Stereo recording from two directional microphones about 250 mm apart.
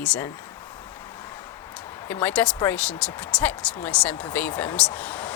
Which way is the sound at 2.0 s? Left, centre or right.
Centre.